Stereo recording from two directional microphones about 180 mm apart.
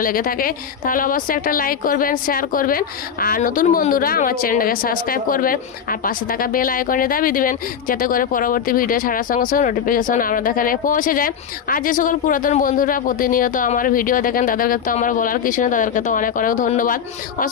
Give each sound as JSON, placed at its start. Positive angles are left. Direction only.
{"t": 0.0, "sound": "a woman's voice", "side_deg": 50}